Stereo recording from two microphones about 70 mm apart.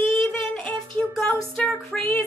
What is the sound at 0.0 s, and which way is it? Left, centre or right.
Child singing, centre.